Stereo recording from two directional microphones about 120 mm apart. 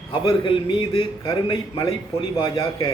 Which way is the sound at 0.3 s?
50° left (ahead or behind).